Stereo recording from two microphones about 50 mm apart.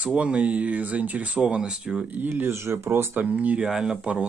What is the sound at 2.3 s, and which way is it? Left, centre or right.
Speech, right.